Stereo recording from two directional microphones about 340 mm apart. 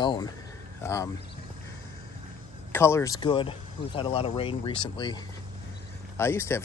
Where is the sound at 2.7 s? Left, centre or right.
Centre.